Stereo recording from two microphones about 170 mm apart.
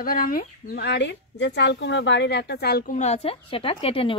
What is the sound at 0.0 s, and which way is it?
Speech, 55° left (ahead or behind).